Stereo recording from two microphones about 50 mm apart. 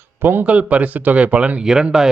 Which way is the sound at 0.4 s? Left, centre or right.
Right.